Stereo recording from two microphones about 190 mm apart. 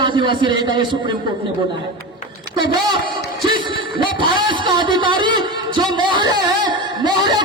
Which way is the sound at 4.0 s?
25° right (ahead or behind).